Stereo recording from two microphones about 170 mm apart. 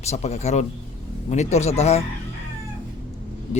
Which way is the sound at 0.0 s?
40° left (ahead or behind).